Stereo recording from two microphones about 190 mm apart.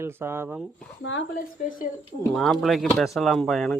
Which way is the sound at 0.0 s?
10° right (ahead or behind).